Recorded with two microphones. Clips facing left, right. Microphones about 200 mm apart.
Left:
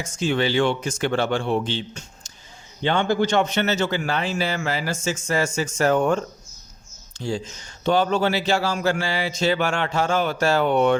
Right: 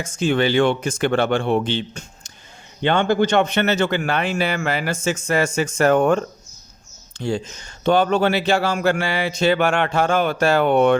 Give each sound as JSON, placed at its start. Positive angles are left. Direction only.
{"t": 0.0, "sound": "speech", "side_deg": -55}